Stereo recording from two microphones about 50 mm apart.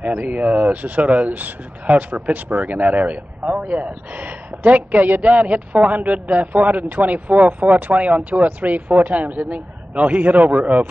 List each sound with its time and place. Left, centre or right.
0.0 s speech: right